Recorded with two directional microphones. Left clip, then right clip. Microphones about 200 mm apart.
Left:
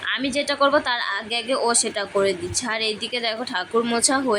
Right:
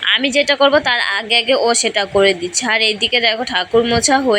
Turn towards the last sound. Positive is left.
turn(degrees=-10)  # may be behind; listen again after turning